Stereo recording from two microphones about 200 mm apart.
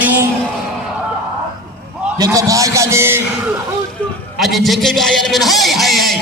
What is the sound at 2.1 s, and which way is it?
A man's voice, 15° right (ahead or behind).